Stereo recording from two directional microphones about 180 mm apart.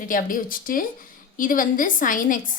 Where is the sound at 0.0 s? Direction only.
50° left (ahead or behind).